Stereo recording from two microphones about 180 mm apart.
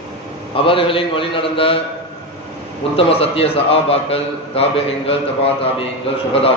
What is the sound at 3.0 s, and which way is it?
A man's voice, 30° left (ahead or behind).